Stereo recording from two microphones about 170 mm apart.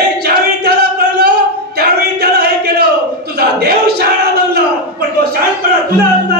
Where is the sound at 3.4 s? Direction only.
65° right (ahead or behind).